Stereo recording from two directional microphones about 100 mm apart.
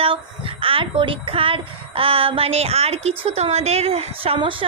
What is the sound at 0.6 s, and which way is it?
A woman's voice, 65° right (ahead or behind).